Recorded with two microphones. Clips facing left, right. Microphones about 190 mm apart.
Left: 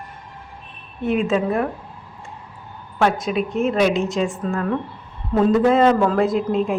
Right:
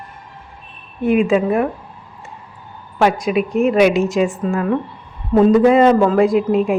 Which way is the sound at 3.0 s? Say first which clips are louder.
Right 4 dB; 5° right (ahead or behind).